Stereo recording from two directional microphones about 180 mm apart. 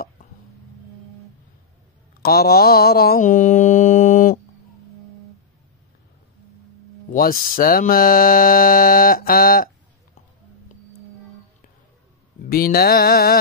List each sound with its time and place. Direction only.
2.2 s speech: 60° left (ahead or behind)
7.1 s speech: 50° left (ahead or behind)
12.4 s a sound: 55° left (ahead or behind)